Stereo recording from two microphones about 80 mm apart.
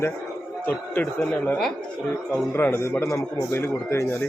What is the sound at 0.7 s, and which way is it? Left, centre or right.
A man's voice, centre.